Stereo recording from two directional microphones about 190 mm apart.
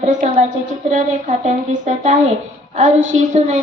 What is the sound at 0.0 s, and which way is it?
A woman's voice, 35° right (ahead or behind).